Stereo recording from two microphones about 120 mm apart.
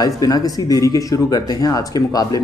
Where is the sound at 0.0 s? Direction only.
30° left (ahead or behind).